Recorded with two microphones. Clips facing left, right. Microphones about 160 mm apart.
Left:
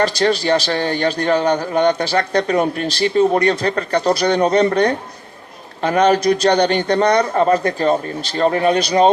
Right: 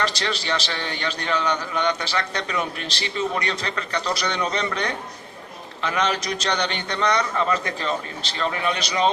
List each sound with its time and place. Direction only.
0.0 s a man's voice: 50° left (ahead or behind)
1.7 s a man's voice: 35° left (ahead or behind); by 4.9 s 50° left (ahead or behind)
6.2 s a man's voice: 50° left (ahead or behind); by 9.1 s 35° left (ahead or behind)